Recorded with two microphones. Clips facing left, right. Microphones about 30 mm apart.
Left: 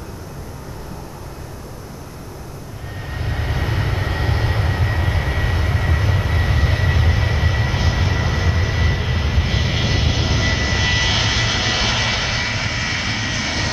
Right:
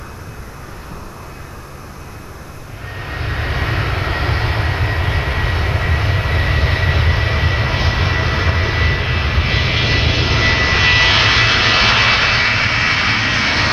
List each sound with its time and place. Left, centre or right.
3.0 s vehicle: right